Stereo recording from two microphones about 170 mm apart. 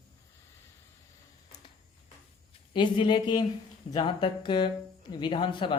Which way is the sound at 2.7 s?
30° left (ahead or behind).